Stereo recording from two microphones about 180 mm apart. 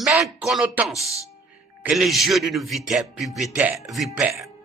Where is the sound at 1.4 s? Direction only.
5° right (ahead or behind).